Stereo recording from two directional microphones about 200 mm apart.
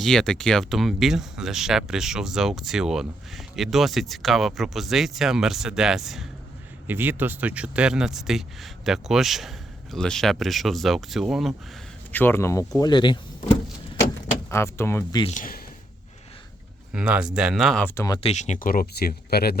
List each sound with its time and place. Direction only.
0.0 s speech: 5° left (ahead or behind)
12.1 s speech: 10° left (ahead or behind)
14.5 s speech: 15° left (ahead or behind)
15.2 s speech: 35° left (ahead or behind)
16.9 s speech: 5° right (ahead or behind); by 18.2 s 15° left (ahead or behind)
18.2 s speech: 35° left (ahead or behind); by 19.5 s 50° left (ahead or behind)